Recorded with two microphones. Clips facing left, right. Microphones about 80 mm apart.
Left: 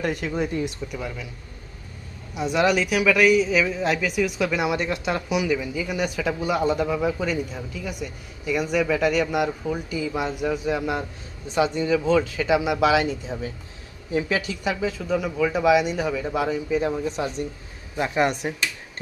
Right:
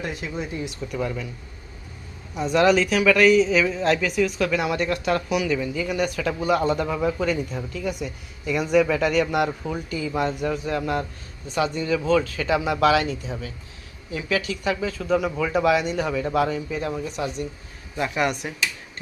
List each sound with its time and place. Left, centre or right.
0.0 s speech: left
0.9 s speech: centre
2.3 s speech: centre
11.5 s speech: left
15.1 s speech: centre; by 18.5 s left